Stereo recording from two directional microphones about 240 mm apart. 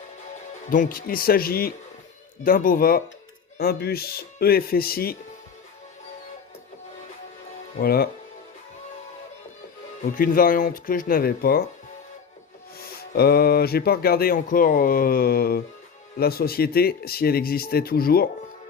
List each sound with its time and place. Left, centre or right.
0.7 s speech: left
7.8 s speech: left
10.0 s speech: left
12.8 s speech: left